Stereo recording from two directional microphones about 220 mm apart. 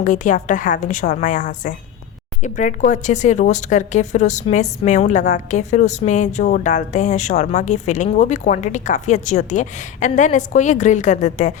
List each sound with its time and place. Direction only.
0.0 s speech: 35° left (ahead or behind)